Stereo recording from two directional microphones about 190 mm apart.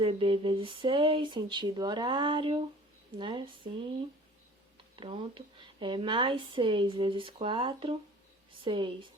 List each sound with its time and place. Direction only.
0.0 s speech: 30° right (ahead or behind)
4.9 s speech: 25° right (ahead or behind)